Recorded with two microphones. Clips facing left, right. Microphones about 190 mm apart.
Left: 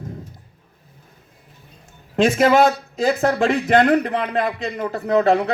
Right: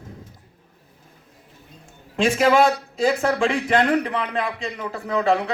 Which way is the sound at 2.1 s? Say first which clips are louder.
Left 3 dB; 40° left (ahead or behind).